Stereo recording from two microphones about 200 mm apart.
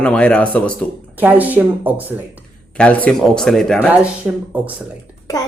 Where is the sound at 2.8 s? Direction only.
5° left (ahead or behind).